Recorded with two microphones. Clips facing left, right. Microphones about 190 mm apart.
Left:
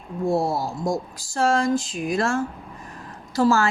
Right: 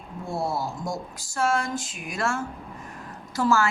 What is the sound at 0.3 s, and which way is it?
A woman's voice, 40° left (ahead or behind).